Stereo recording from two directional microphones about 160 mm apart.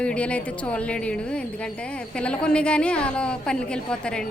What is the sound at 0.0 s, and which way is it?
A woman's voice, 5° left (ahead or behind).